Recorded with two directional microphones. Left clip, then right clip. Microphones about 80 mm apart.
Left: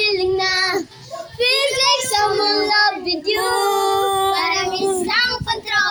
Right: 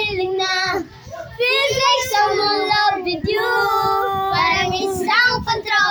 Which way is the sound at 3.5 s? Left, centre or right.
Left.